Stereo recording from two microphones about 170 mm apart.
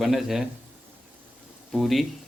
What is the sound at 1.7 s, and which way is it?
Speech, centre (ahead or behind).